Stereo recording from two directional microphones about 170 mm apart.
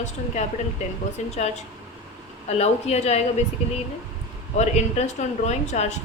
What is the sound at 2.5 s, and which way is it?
Speech, 40° left (ahead or behind).